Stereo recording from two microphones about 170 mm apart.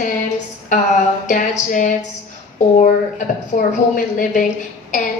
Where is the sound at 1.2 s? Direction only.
50° left (ahead or behind).